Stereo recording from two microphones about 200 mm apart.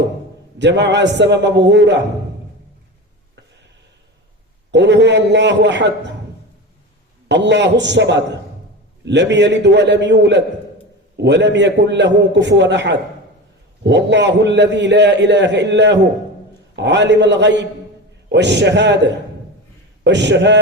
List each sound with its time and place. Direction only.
0.6 s a man's voice: 60° right (ahead or behind)
4.7 s a man's voice: 60° right (ahead or behind)
7.3 s a man's voice: 60° right (ahead or behind)